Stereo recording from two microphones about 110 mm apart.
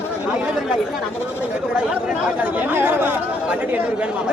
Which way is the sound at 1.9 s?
10° right (ahead or behind).